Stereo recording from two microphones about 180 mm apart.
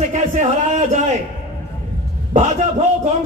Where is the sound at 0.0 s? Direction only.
40° right (ahead or behind).